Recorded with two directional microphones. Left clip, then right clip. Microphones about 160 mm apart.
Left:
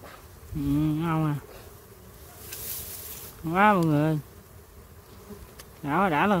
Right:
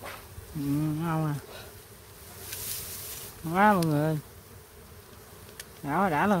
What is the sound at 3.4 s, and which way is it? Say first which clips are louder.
Speech: left 2 dB; 5° left (ahead or behind).